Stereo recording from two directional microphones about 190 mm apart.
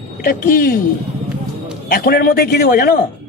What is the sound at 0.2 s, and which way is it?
Speech, 50° left (ahead or behind).